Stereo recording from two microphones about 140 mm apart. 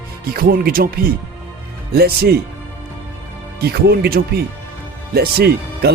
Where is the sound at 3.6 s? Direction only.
90° right.